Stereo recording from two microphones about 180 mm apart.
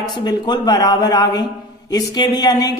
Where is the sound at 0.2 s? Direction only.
20° left (ahead or behind).